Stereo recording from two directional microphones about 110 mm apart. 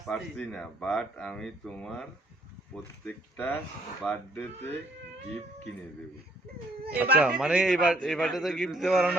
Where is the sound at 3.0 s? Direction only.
10° left (ahead or behind).